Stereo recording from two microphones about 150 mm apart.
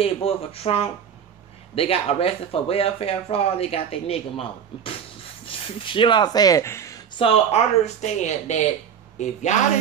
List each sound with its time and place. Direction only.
0.0 s speech: 40° left (ahead or behind); by 6.9 s 20° left (ahead or behind)
7.2 s speech: 40° left (ahead or behind)